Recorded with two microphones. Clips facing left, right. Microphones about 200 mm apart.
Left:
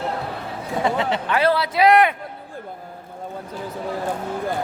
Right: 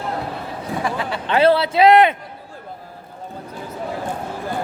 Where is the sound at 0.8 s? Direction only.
20° left (ahead or behind).